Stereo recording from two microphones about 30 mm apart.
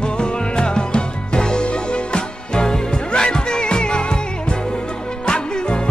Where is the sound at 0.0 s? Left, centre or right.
Left.